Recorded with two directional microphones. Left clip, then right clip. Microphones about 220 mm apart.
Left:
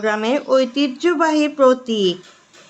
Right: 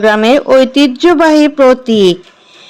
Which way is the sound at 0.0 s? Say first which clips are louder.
Right 11 dB; 40° right (ahead or behind).